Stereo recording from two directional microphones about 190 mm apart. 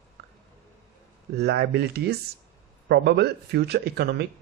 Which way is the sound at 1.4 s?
60° right (ahead or behind).